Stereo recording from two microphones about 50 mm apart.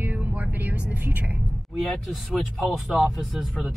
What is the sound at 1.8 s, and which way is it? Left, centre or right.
Speech, centre.